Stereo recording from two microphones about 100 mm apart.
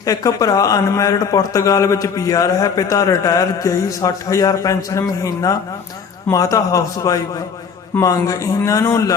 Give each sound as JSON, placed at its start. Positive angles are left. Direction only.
{"t": 0.0, "sound": "a man's voice", "side_deg": 35}